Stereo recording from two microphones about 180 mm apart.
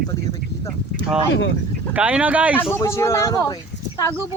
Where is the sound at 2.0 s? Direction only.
5° right (ahead or behind).